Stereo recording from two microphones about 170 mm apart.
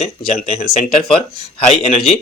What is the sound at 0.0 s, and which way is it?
Speech, 40° left (ahead or behind).